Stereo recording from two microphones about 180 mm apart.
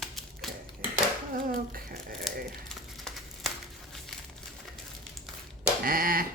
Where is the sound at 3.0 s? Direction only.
Centre (ahead or behind).